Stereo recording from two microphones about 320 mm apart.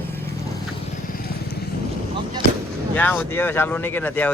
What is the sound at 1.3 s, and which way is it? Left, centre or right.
Vehicle, left.